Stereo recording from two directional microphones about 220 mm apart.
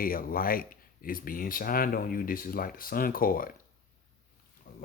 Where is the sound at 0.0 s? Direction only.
40° left (ahead or behind).